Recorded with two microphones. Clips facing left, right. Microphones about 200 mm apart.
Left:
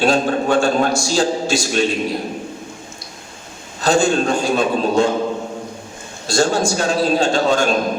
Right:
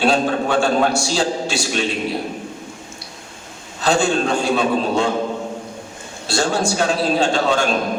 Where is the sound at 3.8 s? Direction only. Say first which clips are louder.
Left 2 dB; 45° left (ahead or behind).